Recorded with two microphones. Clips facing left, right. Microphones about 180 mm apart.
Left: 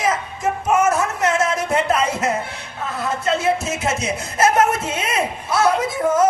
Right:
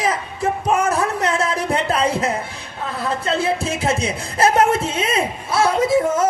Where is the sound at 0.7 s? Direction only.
35° right (ahead or behind).